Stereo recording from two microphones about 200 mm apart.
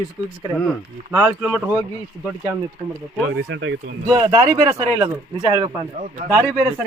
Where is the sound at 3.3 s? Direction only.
65° right (ahead or behind).